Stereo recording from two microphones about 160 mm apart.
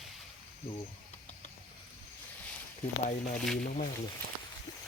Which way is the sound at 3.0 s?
55° left (ahead or behind).